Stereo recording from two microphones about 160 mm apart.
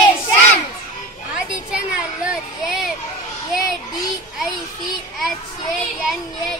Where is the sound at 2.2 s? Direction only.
5° right (ahead or behind).